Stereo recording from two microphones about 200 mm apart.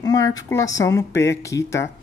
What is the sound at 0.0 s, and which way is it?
Speech, 15° left (ahead or behind).